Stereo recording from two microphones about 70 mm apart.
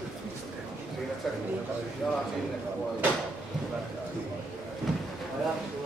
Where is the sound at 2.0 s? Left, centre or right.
Centre.